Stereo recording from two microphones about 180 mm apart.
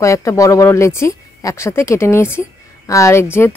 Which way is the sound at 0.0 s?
15° left (ahead or behind).